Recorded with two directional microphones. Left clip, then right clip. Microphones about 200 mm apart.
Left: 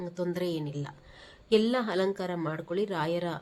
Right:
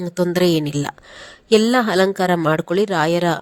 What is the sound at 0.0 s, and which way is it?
Speech, 45° right (ahead or behind).